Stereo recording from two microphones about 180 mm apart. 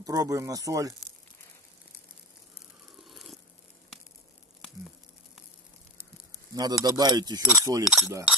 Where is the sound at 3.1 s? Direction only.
Centre (ahead or behind).